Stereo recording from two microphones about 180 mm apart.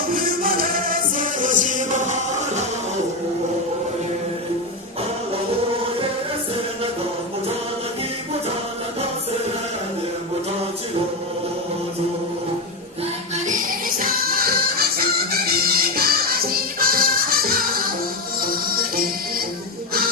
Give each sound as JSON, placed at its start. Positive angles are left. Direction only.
{"t": 0.1, "sound": "music", "side_deg": -55}
{"t": 13.5, "sound": "music", "side_deg": -50}